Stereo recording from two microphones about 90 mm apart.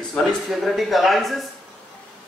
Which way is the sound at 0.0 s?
5° left (ahead or behind).